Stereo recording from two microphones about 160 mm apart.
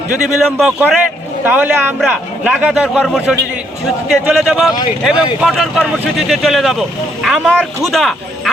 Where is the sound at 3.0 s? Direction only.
5° left (ahead or behind).